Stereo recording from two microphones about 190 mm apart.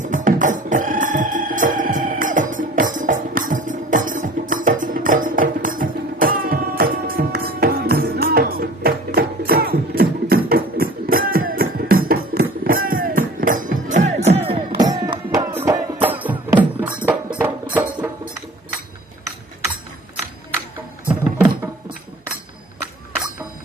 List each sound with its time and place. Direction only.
0.0 s music: 40° right (ahead or behind); by 17.9 s 10° right (ahead or behind)
21.1 s music: 10° right (ahead or behind)